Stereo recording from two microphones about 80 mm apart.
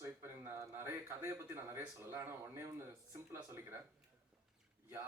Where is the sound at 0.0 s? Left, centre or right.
Right.